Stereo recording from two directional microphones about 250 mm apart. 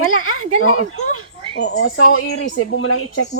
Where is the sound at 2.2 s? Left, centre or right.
Left.